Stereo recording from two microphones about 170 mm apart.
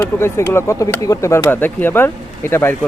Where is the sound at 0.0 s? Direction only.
15° left (ahead or behind).